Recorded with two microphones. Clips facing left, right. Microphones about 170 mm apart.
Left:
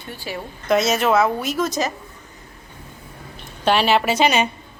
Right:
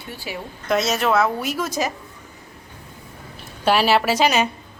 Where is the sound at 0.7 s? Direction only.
Centre (ahead or behind).